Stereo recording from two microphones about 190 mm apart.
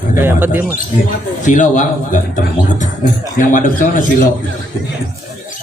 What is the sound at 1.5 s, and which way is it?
A man's voice, 40° left (ahead or behind).